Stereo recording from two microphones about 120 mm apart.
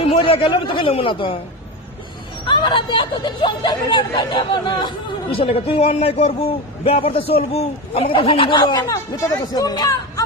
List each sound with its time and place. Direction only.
0.0 s a man's voice: 50° left (ahead or behind)
2.5 s speech: 40° left (ahead or behind)
5.3 s a man's voice: 50° left (ahead or behind); by 10.2 s 35° left (ahead or behind)